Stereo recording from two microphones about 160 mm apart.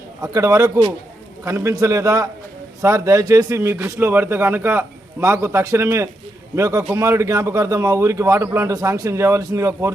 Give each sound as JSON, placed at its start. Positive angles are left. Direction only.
{"t": 0.2, "sound": "a man's voice", "side_deg": -20}